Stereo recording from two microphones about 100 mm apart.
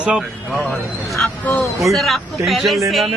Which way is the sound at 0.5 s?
10° left (ahead or behind).